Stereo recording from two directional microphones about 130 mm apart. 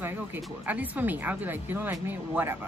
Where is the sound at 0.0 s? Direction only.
15° right (ahead or behind).